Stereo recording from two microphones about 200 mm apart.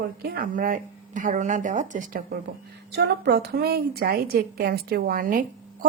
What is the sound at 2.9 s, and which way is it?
A woman's voice, 55° right (ahead or behind).